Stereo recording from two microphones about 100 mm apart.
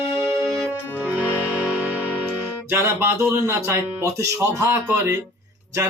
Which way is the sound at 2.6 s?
25° right (ahead or behind).